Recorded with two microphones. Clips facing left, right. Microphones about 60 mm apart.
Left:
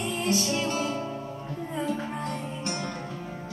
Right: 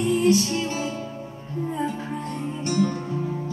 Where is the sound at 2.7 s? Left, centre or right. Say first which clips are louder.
Right 13 dB; left.